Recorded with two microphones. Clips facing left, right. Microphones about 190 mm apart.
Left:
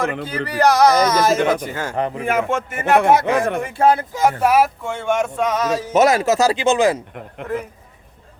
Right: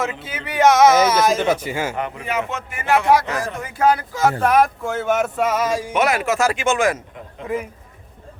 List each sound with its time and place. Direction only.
0.3 s speech: centre (ahead or behind)
2.0 s speech: 35° left (ahead or behind)
2.2 s speech: 50° left (ahead or behind)
3.1 s speech: 25° left (ahead or behind)
4.4 s speech: 5° left (ahead or behind); by 5.9 s 10° right (ahead or behind)
5.9 s speech: 40° left (ahead or behind)
7.4 s speech: 10° right (ahead or behind)